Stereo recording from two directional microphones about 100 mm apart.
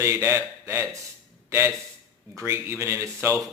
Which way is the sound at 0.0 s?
30° right (ahead or behind).